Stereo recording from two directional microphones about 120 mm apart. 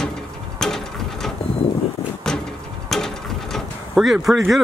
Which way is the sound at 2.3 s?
5° left (ahead or behind).